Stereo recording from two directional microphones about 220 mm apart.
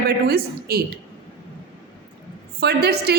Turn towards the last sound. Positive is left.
turn(degrees=-45)  # may be behind; listen again after turning